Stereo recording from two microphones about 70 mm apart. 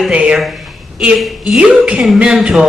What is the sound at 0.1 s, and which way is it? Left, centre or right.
Speech, centre.